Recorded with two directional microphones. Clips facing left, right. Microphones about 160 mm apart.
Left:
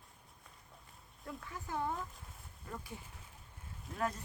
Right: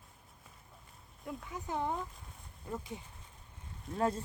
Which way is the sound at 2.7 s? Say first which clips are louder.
Right 5 dB; 20° right (ahead or behind).